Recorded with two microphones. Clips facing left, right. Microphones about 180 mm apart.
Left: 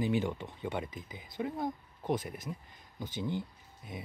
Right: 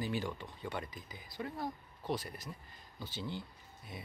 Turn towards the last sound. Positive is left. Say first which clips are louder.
# left 4 dB
turn(degrees=15)  # may be behind; listen again after turning